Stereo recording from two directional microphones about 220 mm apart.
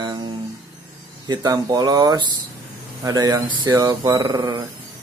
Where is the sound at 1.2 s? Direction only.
20° right (ahead or behind).